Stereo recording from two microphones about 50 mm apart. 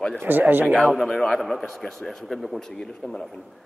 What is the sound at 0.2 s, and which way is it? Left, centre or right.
Speech, right.